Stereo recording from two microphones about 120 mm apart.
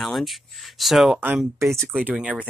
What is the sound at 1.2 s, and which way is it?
Speech, 15° right (ahead or behind).